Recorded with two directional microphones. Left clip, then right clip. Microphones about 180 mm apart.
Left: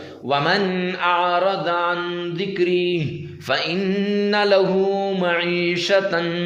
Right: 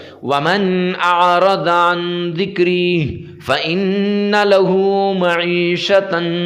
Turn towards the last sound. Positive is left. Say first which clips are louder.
# right 4 dB
turn(degrees=-20)  # may be behind; listen again after turning